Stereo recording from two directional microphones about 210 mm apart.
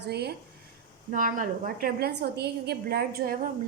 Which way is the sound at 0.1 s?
50° right (ahead or behind).